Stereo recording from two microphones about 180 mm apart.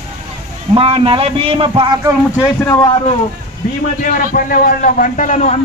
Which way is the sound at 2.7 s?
20° left (ahead or behind).